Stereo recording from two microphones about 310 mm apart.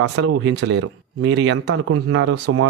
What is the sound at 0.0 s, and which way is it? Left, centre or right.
Speech, right.